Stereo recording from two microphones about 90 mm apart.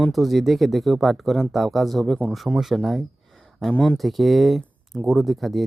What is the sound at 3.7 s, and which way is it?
Speech, 10° left (ahead or behind).